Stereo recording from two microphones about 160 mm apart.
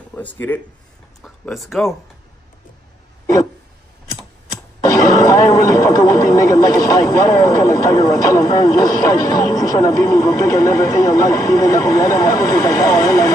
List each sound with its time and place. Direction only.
0.1 s speech: 10° left (ahead or behind)
4.8 s speech: 20° left (ahead or behind)